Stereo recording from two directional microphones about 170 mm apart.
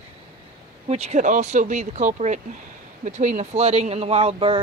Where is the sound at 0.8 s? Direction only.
40° right (ahead or behind).